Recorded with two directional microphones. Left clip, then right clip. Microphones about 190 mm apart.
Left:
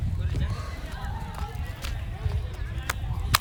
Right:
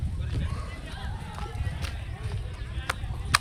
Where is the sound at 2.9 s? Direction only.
20° left (ahead or behind).